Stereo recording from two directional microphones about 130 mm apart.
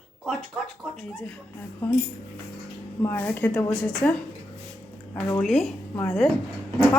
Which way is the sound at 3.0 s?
15° left (ahead or behind).